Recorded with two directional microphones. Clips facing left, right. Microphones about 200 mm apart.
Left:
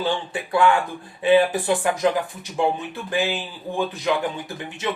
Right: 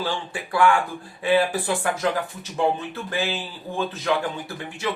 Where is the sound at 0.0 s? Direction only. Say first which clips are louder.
Left 3 dB; 20° left (ahead or behind).